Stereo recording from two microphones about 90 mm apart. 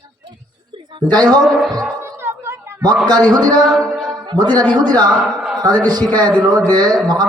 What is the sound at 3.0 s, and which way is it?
Speech, 50° right (ahead or behind).